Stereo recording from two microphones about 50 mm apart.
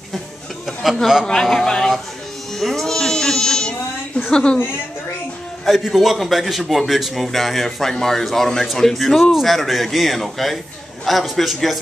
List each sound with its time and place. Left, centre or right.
1.2 s speech: centre
2.5 s sheep: centre
4.3 s speech: centre
5.7 s a man's voice: centre